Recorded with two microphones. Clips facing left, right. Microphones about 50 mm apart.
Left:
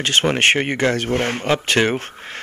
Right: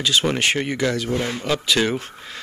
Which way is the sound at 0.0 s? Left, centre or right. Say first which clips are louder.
Left 3 dB; left.